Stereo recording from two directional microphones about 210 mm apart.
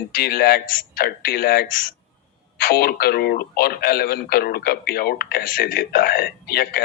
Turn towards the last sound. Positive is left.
turn(degrees=45)  # may be behind; listen again after turning